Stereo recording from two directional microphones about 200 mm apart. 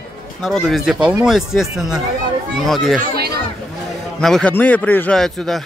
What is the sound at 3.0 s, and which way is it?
Speech, 50° right (ahead or behind).